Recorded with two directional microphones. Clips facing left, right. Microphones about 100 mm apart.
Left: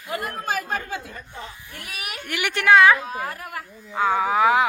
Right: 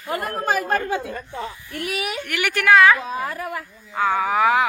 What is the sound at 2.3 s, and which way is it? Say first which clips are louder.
A woman's voice: even; 20° left (ahead or behind).